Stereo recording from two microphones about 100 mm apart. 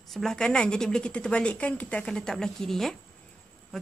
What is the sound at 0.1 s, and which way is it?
A woman's voice, 5° left (ahead or behind).